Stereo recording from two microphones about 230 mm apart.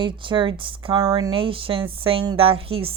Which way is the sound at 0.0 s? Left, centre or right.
Right.